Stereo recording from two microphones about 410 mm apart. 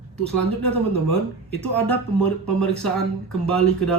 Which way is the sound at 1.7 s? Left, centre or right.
Centre.